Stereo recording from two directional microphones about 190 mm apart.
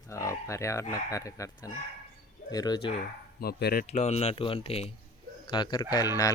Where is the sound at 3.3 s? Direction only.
55° left (ahead or behind).